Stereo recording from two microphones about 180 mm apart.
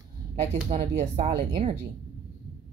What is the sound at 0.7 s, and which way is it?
Speech, 35° right (ahead or behind).